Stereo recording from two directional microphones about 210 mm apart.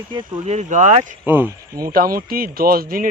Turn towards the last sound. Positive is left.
turn(degrees=-45)  # may be behind; listen again after turning